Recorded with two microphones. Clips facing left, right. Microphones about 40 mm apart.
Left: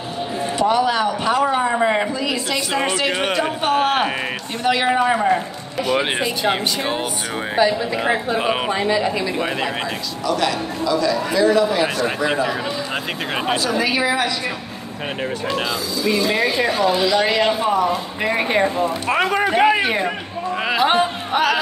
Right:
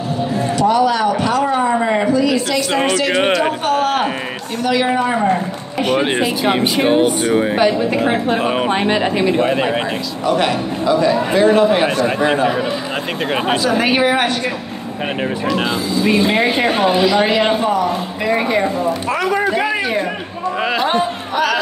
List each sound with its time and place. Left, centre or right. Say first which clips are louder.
0.6 s speech: right 3 dB; left
2.1 s speech: right 6 dB; centre
3.6 s speech: right 1 dB; left
6.1 s speech: right 4 dB; right
7.5 s speech: right 3 dB; right
10.2 s a man's voice: right 4 dB; right
13.7 s speech: right 6 dB; right
15.6 s a man's voice: right 5 dB; right
17.0 s speech: right 3 dB; centre
17.7 s speech: right 1 dB; centre
19.1 s a man's voice: left 2 dB; left
20.6 s a man's voice: even; centre